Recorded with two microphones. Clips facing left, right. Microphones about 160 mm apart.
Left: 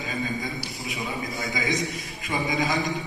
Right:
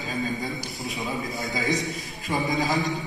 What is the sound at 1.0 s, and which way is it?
A man's voice, centre (ahead or behind).